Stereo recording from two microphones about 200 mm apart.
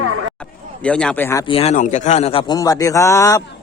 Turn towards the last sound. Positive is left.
turn(degrees=15)  # may be behind; listen again after turning